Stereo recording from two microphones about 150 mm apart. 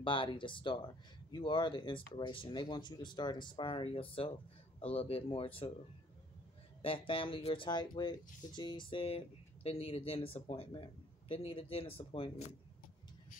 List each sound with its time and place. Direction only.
0.0 s speech: 35° left (ahead or behind)
6.8 s speech: 35° left (ahead or behind)